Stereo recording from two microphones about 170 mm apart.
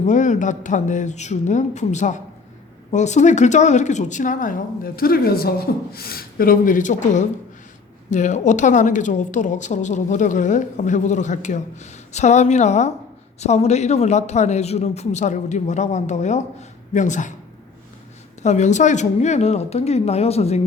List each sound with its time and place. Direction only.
0.0 s a woman's voice: 45° left (ahead or behind)
18.4 s a woman's voice: 45° left (ahead or behind)